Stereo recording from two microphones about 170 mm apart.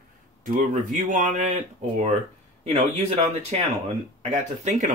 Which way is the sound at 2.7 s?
40° right (ahead or behind).